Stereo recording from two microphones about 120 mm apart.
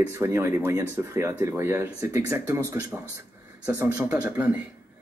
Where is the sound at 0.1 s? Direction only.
20° right (ahead or behind).